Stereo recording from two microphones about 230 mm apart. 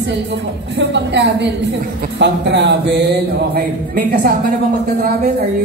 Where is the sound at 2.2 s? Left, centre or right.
Right.